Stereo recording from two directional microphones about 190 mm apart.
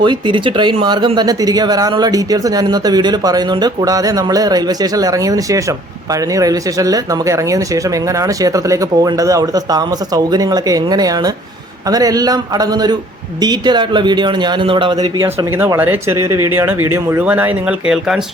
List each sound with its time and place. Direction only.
0.0 s speech: 25° right (ahead or behind)
15.6 s speech: 10° right (ahead or behind)